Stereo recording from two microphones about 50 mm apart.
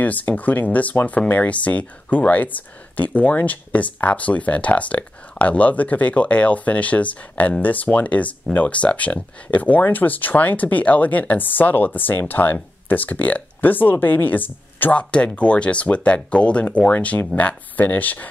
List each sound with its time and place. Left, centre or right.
0.0 s speech: left